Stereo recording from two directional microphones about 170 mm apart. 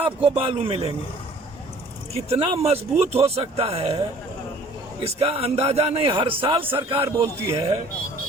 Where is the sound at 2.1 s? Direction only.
35° right (ahead or behind).